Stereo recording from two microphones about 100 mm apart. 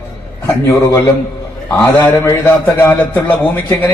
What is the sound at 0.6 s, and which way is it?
A man's voice, 30° left (ahead or behind).